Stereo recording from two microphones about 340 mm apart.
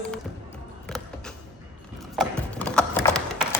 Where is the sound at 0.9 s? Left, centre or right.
Centre.